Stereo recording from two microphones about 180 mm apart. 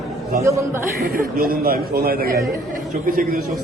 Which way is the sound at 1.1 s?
55° right (ahead or behind).